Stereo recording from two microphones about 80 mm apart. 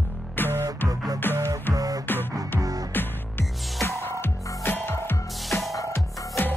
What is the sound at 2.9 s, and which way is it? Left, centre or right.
Music, left.